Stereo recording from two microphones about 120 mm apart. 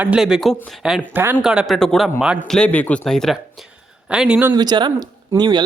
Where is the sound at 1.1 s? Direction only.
15° right (ahead or behind).